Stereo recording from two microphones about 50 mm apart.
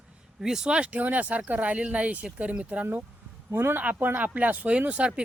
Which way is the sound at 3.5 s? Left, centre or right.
Right.